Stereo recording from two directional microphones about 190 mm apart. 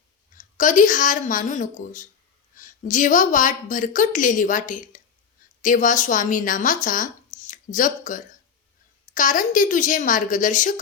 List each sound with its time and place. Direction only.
0.3 s a woman's voice: 40° left (ahead or behind)